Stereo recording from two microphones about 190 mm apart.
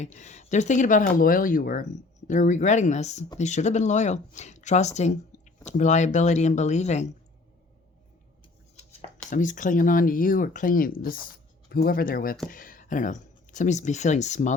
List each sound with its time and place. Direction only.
0.0 s speech: 40° left (ahead or behind)
8.7 s chopping: 35° left (ahead or behind)
9.3 s speech: 45° left (ahead or behind)